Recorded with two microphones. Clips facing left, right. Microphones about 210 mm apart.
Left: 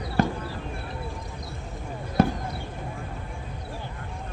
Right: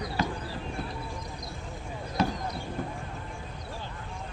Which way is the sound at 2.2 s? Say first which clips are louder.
Left 6 dB; 50° left (ahead or behind).